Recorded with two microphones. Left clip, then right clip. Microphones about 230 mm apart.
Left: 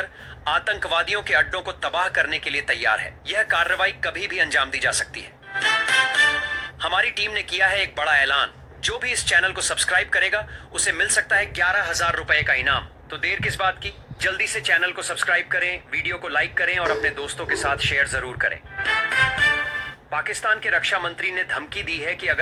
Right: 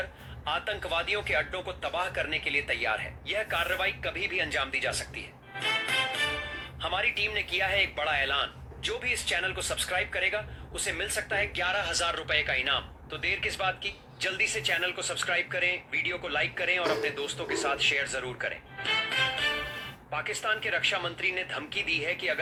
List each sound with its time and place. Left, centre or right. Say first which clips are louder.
0.4 s speech: left 9 dB; centre